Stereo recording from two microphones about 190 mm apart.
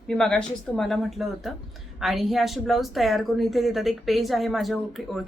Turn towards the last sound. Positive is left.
turn(degrees=0)  # may be behind; listen again after turning